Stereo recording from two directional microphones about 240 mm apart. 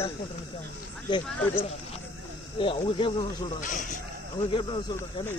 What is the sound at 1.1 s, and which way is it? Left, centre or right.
Speech, centre.